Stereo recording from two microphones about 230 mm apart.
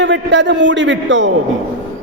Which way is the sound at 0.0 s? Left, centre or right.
Right.